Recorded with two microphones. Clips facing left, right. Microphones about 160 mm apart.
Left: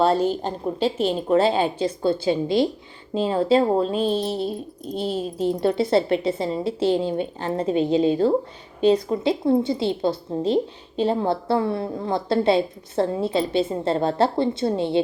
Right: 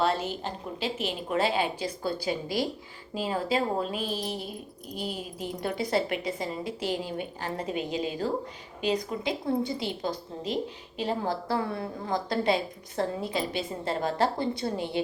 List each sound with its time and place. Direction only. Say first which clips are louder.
0.0 s a woman's voice: left 8 dB; 35° left (ahead or behind)